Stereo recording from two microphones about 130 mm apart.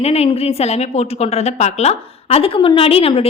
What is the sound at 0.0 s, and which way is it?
A woman's voice, 50° left (ahead or behind).